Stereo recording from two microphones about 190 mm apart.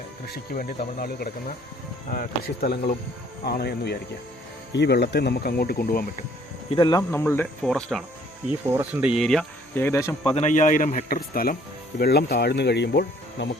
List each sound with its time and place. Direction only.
0.3 s speech: 50° left (ahead or behind)
6.7 s speech: 25° left (ahead or behind)
7.7 s speech: centre (ahead or behind)
8.7 s speech: 10° right (ahead or behind); by 10.2 s 10° left (ahead or behind)
10.2 s speech: 35° left (ahead or behind); by 13.5 s 60° left (ahead or behind)